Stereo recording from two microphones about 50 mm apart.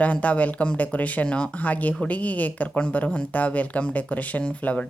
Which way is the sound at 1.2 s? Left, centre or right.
Centre.